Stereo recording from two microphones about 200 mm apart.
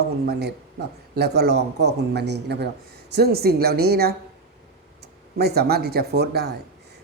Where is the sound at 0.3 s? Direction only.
55° right (ahead or behind).